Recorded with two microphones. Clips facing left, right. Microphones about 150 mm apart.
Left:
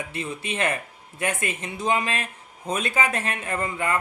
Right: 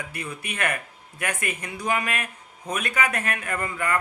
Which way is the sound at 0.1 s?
25° left (ahead or behind).